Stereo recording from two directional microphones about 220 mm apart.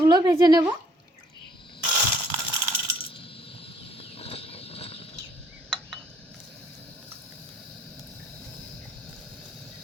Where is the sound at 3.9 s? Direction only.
25° left (ahead or behind).